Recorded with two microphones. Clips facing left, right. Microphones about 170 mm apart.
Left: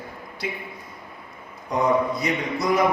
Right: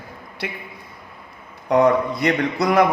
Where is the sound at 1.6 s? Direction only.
65° right (ahead or behind).